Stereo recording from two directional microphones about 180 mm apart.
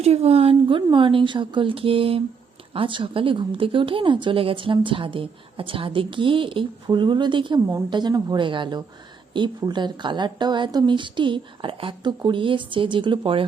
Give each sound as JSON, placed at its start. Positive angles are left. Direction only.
{"t": 0.0, "sound": "a woman's voice", "side_deg": -35}